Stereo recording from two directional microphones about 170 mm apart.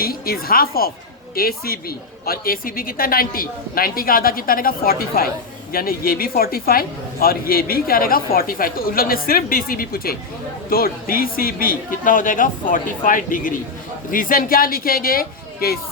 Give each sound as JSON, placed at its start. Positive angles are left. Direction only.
{"t": 0.0, "sound": "a woman's voice", "side_deg": 60}